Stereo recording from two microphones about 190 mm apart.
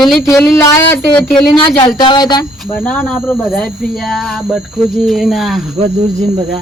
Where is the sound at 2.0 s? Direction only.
25° left (ahead or behind).